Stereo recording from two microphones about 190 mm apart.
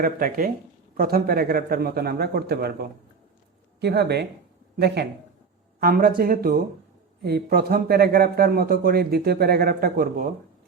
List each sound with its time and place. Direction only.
0.0 s speech: 50° right (ahead or behind)
5.8 s speech: 50° right (ahead or behind)